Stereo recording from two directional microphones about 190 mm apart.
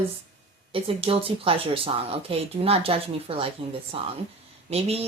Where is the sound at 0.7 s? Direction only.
30° right (ahead or behind).